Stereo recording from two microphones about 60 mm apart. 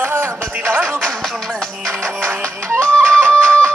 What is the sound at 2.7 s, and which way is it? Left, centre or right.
Music, centre.